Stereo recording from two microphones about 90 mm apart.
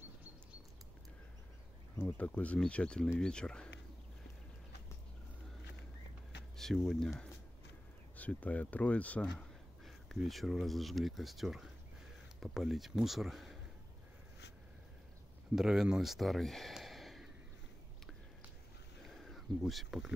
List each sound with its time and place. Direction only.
2.0 s speech: 20° left (ahead or behind)
6.5 s speech: centre (ahead or behind)
8.2 s speech: 15° left (ahead or behind)
9.8 s speech: centre (ahead or behind)
15.5 s speech: 5° right (ahead or behind)
19.0 s a sound: centre (ahead or behind)
19.6 s speech: centre (ahead or behind)